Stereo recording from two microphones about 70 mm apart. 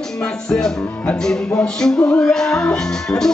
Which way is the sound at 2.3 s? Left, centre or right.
Centre.